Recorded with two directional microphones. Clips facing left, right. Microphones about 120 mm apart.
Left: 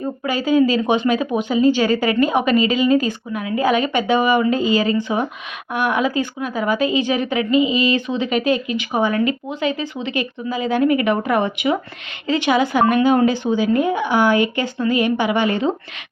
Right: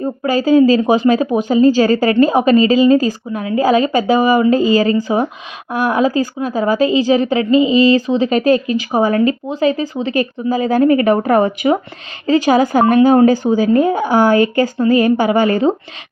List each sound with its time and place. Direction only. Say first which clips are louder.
0.0 s a woman's voice: right 6 dB; 35° right (ahead or behind)